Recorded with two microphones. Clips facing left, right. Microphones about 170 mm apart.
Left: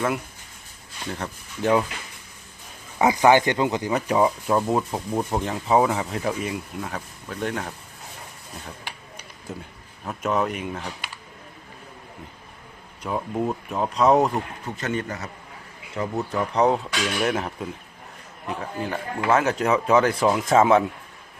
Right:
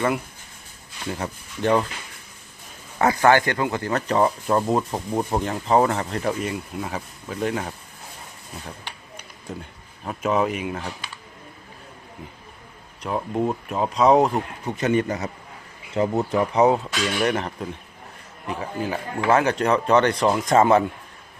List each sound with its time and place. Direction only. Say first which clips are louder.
1.6 s speech: even; 5° left (ahead or behind)
3.0 s speech: left 1 dB; 15° left (ahead or behind); by 7.7 s centre (ahead or behind)
9.1 s a sound: right 2 dB; 5° left (ahead or behind)
10.1 s speech: right 2 dB; centre (ahead or behind)
13.0 s speech: right 2 dB; centre (ahead or behind)
14.3 s speech: right 3 dB; 15° right (ahead or behind)
16.0 s speech: right 6 dB; 35° right (ahead or behind)
16.3 s speech: right 1 dB; 10° right (ahead or behind)